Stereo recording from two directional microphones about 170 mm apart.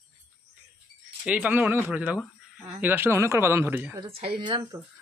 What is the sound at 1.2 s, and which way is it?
Speech, 10° right (ahead or behind).